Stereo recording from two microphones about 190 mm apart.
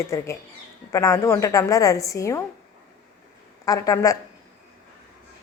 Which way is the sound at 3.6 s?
20° left (ahead or behind).